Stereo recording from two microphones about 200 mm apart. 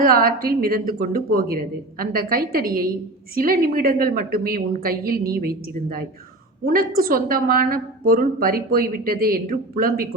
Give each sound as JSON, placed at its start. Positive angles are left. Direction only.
{"t": 0.0, "sound": "a woman's voice", "side_deg": -45}